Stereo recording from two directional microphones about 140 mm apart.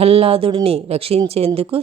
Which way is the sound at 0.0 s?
45° right (ahead or behind).